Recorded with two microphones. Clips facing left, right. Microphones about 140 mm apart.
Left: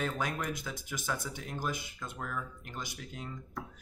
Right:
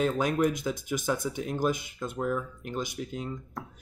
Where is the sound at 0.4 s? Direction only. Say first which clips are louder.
Right 11 dB; 20° right (ahead or behind).